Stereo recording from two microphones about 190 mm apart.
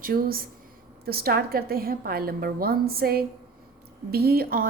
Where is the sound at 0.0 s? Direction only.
50° right (ahead or behind).